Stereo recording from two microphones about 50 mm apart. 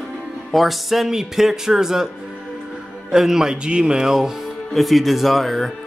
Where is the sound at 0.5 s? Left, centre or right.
Centre.